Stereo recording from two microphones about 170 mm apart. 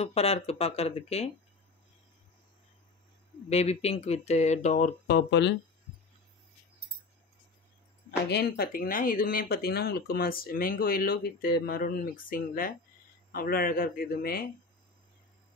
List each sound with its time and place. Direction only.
0.0 s speech: 35° left (ahead or behind)
3.4 s speech: 40° left (ahead or behind)
5.0 s speech: 80° left
8.3 s speech: 65° left (ahead or behind)